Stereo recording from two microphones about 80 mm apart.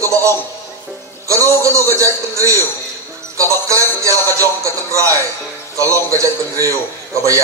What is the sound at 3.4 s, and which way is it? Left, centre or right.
Jingle bell, right.